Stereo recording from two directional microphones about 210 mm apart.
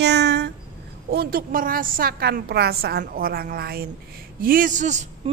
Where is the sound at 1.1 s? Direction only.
45° right (ahead or behind).